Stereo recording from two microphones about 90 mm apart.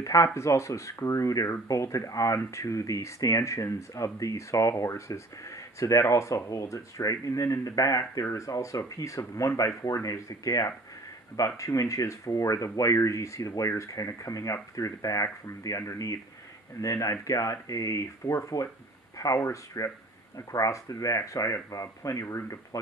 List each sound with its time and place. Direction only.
0.0 s speech: 35° left (ahead or behind)